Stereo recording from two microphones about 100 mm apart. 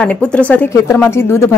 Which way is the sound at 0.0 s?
10° left (ahead or behind).